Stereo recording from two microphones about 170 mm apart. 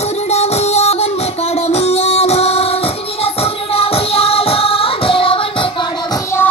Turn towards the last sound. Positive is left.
turn(degrees=30)  # may be behind; listen again after turning